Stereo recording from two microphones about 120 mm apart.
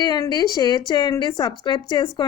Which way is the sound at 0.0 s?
35° left (ahead or behind).